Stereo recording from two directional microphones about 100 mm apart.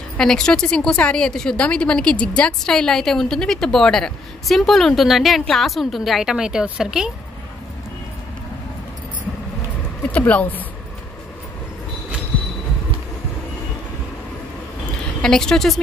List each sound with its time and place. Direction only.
0.2 s a woman's voice: 5° left (ahead or behind)
10.0 s speech: 15° left (ahead or behind)
15.2 s a woman's voice: 5° left (ahead or behind)